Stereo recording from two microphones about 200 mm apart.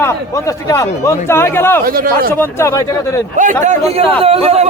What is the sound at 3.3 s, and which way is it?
Speech, 40° right (ahead or behind).